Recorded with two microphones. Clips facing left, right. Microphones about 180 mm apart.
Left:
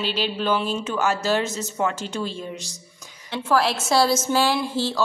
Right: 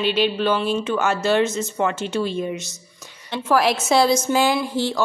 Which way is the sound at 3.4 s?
15° right (ahead or behind).